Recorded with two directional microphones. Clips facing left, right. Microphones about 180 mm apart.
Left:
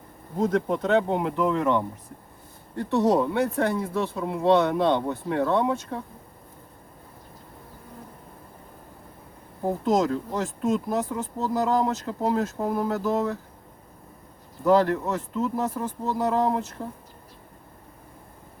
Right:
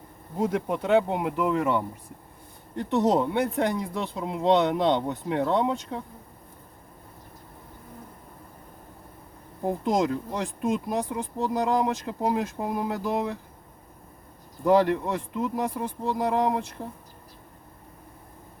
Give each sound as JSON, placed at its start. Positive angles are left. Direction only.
{"t": 0.3, "sound": "speech", "side_deg": -10}
{"t": 10.3, "sound": "speech", "side_deg": -15}
{"t": 14.6, "sound": "speech", "side_deg": -15}